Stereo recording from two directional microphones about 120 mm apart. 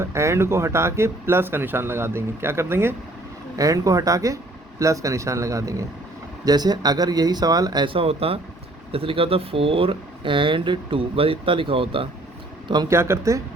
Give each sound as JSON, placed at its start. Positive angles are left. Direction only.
{"t": 0.0, "sound": "speech", "side_deg": -25}
{"t": 12.6, "sound": "speech", "side_deg": -35}
{"t": 12.9, "sound": "speech", "side_deg": -20}